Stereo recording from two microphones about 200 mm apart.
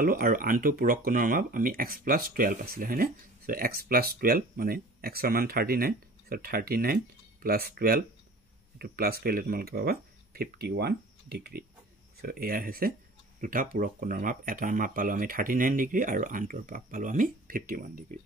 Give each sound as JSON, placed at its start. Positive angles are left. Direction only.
{"t": 0.0, "sound": "speech", "side_deg": -45}